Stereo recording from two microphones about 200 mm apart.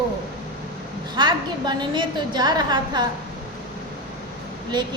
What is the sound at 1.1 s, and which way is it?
A woman's voice, 20° right (ahead or behind).